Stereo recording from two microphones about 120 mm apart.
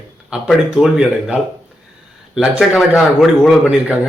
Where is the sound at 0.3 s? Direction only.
5° right (ahead or behind).